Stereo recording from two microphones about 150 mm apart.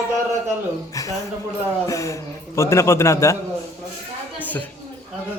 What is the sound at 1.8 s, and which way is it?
A man's voice, 20° left (ahead or behind).